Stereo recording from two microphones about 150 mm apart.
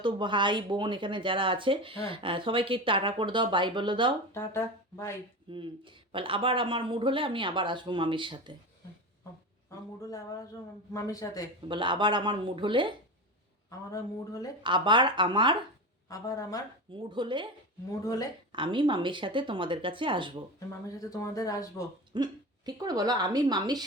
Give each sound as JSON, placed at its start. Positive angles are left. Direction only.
{"t": 0.0, "sound": "speech", "side_deg": -30}
{"t": 4.4, "sound": "speech", "side_deg": 20}
{"t": 5.5, "sound": "speech", "side_deg": -35}
{"t": 10.0, "sound": "speech", "side_deg": 20}
{"t": 11.7, "sound": "speech", "side_deg": -30}
{"t": 13.7, "sound": "speech", "side_deg": 25}
{"t": 14.6, "sound": "speech", "side_deg": -30}
{"t": 16.0, "sound": "speech", "side_deg": 25}
{"t": 16.9, "sound": "speech", "side_deg": -35}
{"t": 18.0, "sound": "speech", "side_deg": 25}
{"t": 18.5, "sound": "speech", "side_deg": -35}
{"t": 20.8, "sound": "speech", "side_deg": 25}
{"t": 22.1, "sound": "speech", "side_deg": -30}